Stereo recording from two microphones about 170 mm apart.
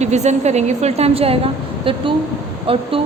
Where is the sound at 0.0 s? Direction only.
40° right (ahead or behind).